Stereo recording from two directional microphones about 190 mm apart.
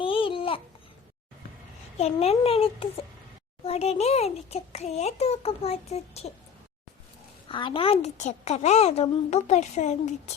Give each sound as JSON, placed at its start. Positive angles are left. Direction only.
{"t": 0.0, "sound": "babbling", "side_deg": 30}
{"t": 2.0, "sound": "a woman's voice", "side_deg": 35}
{"t": 7.4, "sound": "a woman's voice", "side_deg": 25}